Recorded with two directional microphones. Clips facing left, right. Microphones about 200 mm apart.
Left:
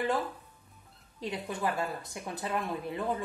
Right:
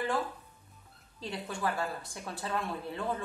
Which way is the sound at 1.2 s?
20° left (ahead or behind).